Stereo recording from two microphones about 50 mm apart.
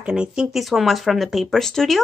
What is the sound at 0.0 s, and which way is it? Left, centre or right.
Speech, centre.